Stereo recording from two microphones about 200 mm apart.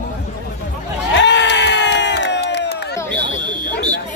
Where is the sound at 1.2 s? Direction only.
60° left (ahead or behind).